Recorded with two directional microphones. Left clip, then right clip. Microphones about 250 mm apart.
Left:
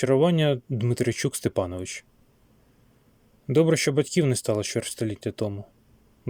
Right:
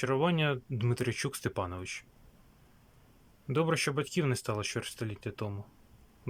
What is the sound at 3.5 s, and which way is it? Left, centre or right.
Speech, centre.